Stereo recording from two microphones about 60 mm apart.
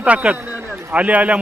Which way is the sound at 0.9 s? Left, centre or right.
Right.